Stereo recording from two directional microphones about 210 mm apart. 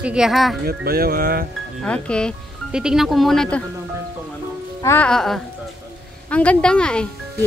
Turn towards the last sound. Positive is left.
turn(degrees=5)  # may be behind; listen again after turning